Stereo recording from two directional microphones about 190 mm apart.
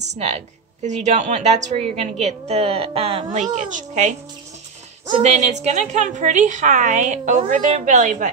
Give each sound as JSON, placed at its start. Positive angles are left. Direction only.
{"t": 0.1, "sound": "a woman's voice", "side_deg": -35}
{"t": 5.2, "sound": "a woman's voice", "side_deg": -35}